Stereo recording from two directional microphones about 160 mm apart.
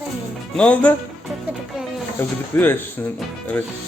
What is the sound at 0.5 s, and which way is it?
Speech, 10° left (ahead or behind).